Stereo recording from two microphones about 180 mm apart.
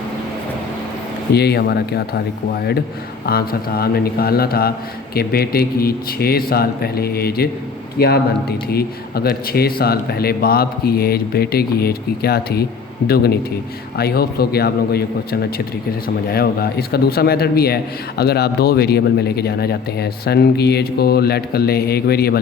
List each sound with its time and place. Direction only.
1.3 s speech: 65° left (ahead or behind)
3.2 s speech: 55° left (ahead or behind)